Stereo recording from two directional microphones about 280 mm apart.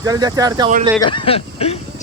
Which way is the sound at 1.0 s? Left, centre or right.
Centre.